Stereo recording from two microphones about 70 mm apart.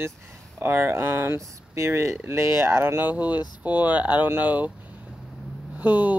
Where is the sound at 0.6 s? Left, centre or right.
Right.